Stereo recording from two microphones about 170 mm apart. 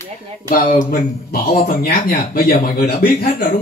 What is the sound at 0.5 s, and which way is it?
Speech, 55° left (ahead or behind).